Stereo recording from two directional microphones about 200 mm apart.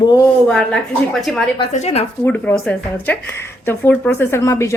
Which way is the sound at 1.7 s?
35° left (ahead or behind).